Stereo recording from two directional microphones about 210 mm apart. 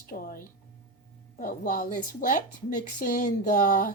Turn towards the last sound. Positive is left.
turn(degrees=40)  # may be behind; listen again after turning